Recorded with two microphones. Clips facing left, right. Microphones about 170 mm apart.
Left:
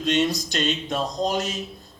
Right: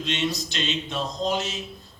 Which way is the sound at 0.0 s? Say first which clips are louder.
Left 5 dB; 45° left (ahead or behind).